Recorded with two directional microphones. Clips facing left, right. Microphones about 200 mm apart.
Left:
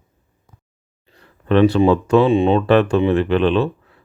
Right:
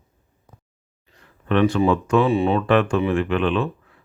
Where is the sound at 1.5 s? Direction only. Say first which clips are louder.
Left 5 dB; 30° left (ahead or behind).